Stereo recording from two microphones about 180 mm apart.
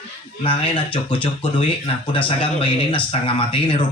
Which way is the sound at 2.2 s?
30° left (ahead or behind).